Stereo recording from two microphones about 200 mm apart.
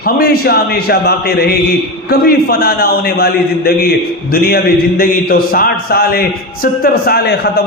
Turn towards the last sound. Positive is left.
turn(degrees=55)  # may be behind; listen again after turning